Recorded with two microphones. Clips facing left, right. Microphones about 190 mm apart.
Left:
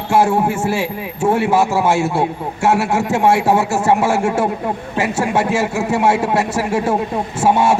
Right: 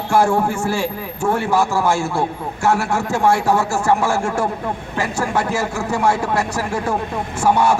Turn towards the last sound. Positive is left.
turn(degrees=25)  # may be behind; listen again after turning